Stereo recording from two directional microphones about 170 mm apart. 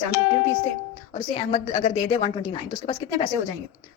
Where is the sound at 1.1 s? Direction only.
30° left (ahead or behind).